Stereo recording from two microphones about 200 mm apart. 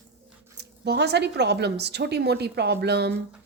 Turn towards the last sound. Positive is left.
turn(degrees=-55)  # may be behind; listen again after turning